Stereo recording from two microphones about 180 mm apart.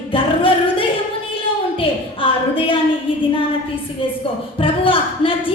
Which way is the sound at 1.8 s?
30° left (ahead or behind).